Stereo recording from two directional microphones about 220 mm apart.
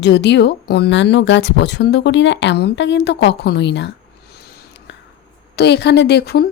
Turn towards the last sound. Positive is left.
turn(degrees=45)  # may be behind; listen again after turning